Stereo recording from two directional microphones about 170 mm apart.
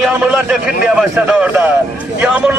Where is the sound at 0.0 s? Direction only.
5° right (ahead or behind).